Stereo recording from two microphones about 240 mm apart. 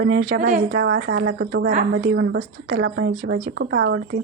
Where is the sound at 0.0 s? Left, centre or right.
Right.